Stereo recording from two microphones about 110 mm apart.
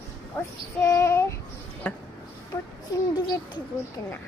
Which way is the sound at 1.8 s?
15° left (ahead or behind).